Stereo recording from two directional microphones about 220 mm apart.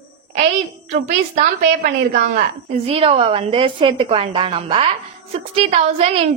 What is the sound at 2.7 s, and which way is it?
A woman's voice, 25° right (ahead or behind).